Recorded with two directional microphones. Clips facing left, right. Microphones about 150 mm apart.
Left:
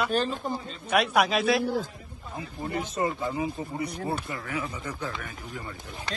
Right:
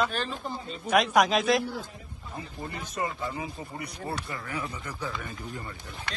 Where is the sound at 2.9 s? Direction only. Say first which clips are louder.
Left 2 dB; 25° left (ahead or behind).